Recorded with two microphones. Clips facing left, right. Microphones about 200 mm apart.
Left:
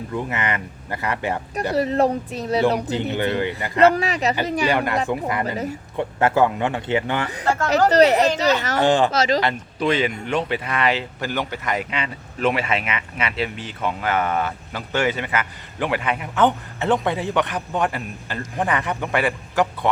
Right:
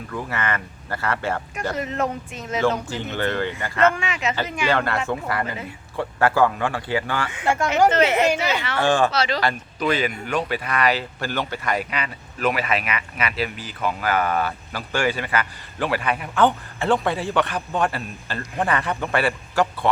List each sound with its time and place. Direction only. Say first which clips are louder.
0.1 s speech: left 1 dB; 20° left (ahead or behind)
1.7 s speech: left 8 dB; 35° left (ahead or behind)
2.8 s speech: left 3 dB; 15° left (ahead or behind)
3.8 s speech: left 5 dB; 35° left (ahead or behind)
4.7 s speech: left 1 dB; 15° left (ahead or behind)
7.3 s speech: left 1 dB; 35° left (ahead or behind)
8.8 s speech: left 1 dB; 20° left (ahead or behind)
9.1 s speech: left 4 dB; 40° left (ahead or behind)
9.4 s speech: left 1 dB; 25° left (ahead or behind)